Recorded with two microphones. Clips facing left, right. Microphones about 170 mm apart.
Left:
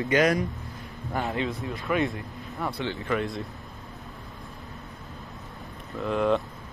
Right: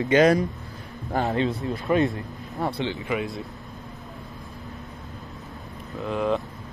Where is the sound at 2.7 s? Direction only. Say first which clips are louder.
Right 1 dB; 20° right (ahead or behind).